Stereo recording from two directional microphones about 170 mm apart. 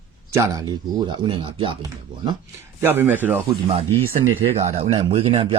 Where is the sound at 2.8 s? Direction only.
10° right (ahead or behind).